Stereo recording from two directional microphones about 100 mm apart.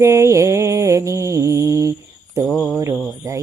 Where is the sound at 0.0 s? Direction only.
30° right (ahead or behind).